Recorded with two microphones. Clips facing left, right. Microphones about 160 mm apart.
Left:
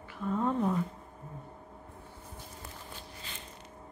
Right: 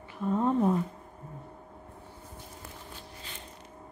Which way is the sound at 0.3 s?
20° right (ahead or behind).